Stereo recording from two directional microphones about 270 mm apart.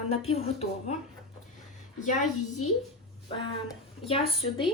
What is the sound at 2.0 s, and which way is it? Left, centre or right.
Speech, left.